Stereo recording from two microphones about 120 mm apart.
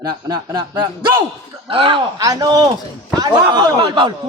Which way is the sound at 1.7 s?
50° right (ahead or behind).